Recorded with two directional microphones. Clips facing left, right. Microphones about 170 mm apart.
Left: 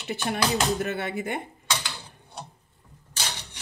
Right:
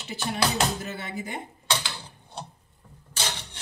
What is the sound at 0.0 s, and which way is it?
Chopping, 60° left (ahead or behind).